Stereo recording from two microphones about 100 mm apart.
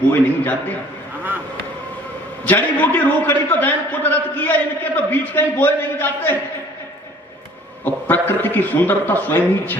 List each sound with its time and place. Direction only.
0.1 s a man's voice: 15° left (ahead or behind)
2.5 s a man's voice: 20° left (ahead or behind)
8.0 s a man's voice: 20° left (ahead or behind)